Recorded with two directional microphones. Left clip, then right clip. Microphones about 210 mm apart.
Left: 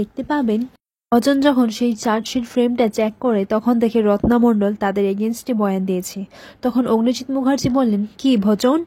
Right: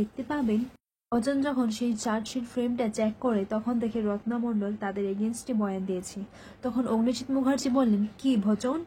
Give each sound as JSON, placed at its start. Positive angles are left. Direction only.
{"t": 0.3, "sound": "speech", "side_deg": 35}
{"t": 1.1, "sound": "speech", "side_deg": 45}